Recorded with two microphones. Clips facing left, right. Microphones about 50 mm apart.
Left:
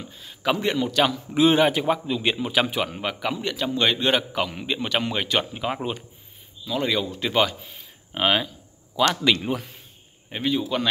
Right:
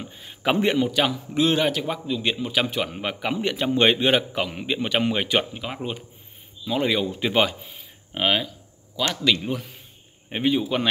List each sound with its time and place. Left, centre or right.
0.0 s a man's voice: right
0.8 s speech: centre
1.3 s a man's voice: centre
3.3 s a man's voice: right
4.0 s a man's voice: centre
5.5 s a man's voice: centre
6.6 s a man's voice: right
7.7 s a sound: centre
8.9 s a man's voice: centre
9.3 s speech: centre
10.3 s a man's voice: right